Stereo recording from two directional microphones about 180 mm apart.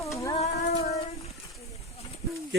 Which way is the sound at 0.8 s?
35° left (ahead or behind).